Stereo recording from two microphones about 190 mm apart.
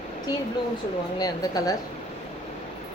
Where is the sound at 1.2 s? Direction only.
20° left (ahead or behind).